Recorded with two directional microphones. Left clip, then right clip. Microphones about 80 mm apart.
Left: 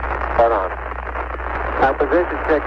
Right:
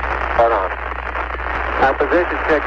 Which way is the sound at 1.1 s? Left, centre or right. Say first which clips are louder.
Right 2 dB; right.